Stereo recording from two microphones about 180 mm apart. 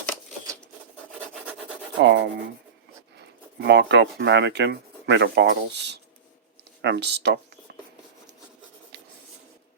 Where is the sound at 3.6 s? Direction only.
75° right (ahead or behind).